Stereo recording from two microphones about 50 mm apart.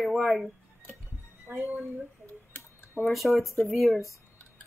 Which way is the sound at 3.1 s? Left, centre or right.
Centre.